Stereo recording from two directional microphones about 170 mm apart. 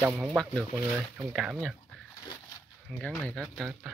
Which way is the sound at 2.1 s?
20° left (ahead or behind).